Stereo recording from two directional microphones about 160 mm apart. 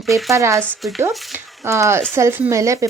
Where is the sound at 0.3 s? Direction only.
20° right (ahead or behind).